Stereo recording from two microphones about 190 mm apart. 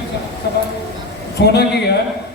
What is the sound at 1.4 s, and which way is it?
Speech, 60° left (ahead or behind).